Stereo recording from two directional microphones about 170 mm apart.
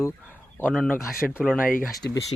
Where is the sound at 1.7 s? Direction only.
55° left (ahead or behind).